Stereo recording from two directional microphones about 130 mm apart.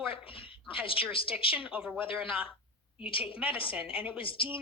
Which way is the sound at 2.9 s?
45° left (ahead or behind).